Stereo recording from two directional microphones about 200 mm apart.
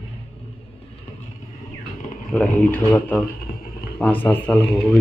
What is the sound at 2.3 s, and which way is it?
Speech, 10° left (ahead or behind).